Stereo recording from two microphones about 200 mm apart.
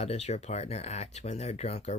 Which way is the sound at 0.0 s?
35° left (ahead or behind).